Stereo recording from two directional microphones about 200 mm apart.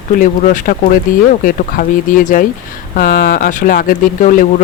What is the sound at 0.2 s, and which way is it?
Speech, 40° left (ahead or behind).